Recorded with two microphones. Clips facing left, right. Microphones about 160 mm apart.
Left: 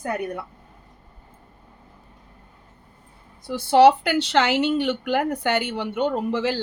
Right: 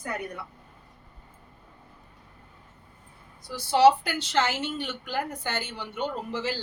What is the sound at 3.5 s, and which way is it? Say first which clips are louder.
Speech: left 5 dB; 60° left (ahead or behind).